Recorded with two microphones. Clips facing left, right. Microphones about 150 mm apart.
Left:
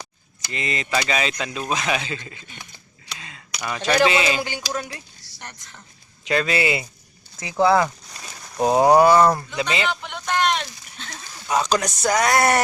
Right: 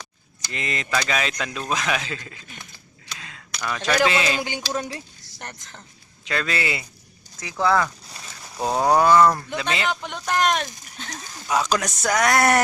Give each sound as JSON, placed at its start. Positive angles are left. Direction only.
{"t": 0.5, "sound": "speech", "side_deg": 0}
{"t": 4.4, "sound": "speech", "side_deg": -20}
{"t": 5.2, "sound": "a sound", "side_deg": -50}
{"t": 6.2, "sound": "speech", "side_deg": 15}
{"t": 9.8, "sound": "a sound", "side_deg": -40}
{"t": 11.5, "sound": "speech", "side_deg": -5}